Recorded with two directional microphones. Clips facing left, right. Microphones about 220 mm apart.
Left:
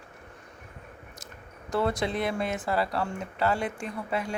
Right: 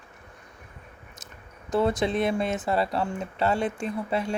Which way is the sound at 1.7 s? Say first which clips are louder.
Right 4 dB; 20° right (ahead or behind).